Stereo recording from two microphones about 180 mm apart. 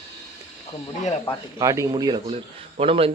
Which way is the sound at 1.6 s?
20° right (ahead or behind).